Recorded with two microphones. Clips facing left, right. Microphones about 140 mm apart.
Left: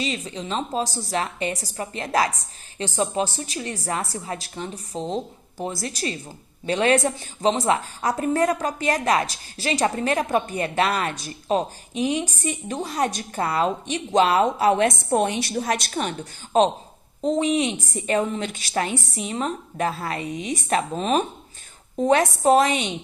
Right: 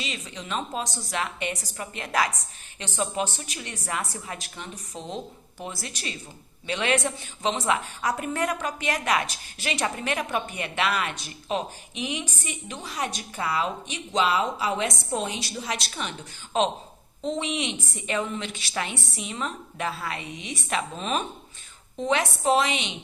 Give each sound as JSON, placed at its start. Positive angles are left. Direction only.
{"t": 0.0, "sound": "a woman's voice", "side_deg": 35}